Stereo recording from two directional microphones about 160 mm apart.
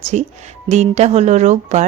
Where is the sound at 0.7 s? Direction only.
45° right (ahead or behind).